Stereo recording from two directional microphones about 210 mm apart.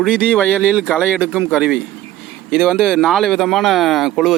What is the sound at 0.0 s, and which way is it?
Speech, 5° right (ahead or behind).